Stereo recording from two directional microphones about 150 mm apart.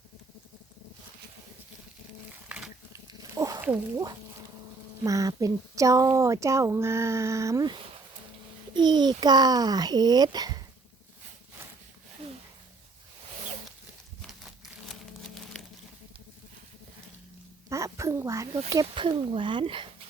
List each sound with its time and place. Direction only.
2.9 s dog: 20° right (ahead or behind)
3.6 s speech: 10° right (ahead or behind)
5.0 s speech: 20° right (ahead or behind)
15.6 s a sound: centre (ahead or behind)
17.7 s a sound: 20° right (ahead or behind)
18.7 s speech: 30° right (ahead or behind)